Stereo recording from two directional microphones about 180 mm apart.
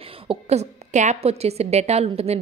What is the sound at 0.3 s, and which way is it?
A woman's voice, 35° right (ahead or behind).